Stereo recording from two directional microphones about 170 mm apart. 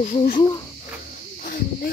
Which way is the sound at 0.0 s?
45° left (ahead or behind).